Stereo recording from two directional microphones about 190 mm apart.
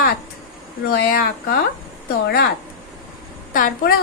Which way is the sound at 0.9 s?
55° left (ahead or behind).